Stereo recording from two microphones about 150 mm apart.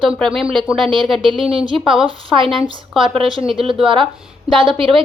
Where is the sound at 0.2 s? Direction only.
5° left (ahead or behind).